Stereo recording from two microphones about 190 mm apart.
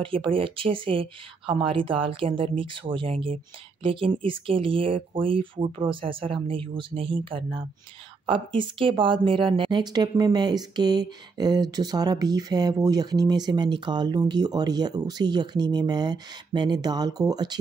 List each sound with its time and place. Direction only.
0.0 s speech: 25° right (ahead or behind)